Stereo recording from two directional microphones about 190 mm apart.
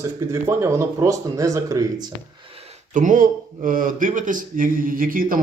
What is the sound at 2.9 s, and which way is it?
Speech, 45° right (ahead or behind).